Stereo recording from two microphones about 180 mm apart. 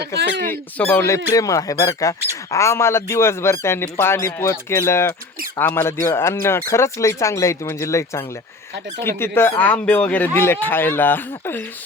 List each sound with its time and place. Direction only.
0.0 s speech: 65° right (ahead or behind)
0.5 s speech: 10° left (ahead or behind)